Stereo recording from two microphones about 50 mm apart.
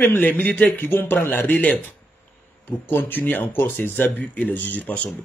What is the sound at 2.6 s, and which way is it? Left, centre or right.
A man's voice, left.